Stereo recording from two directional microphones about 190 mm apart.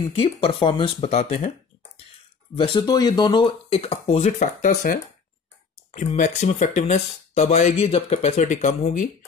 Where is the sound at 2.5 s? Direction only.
25° left (ahead or behind); by 5.0 s 40° left (ahead or behind).